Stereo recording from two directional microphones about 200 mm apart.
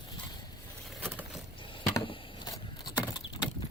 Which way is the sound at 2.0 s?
25° left (ahead or behind).